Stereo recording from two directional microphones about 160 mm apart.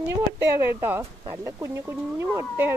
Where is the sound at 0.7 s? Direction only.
15° right (ahead or behind).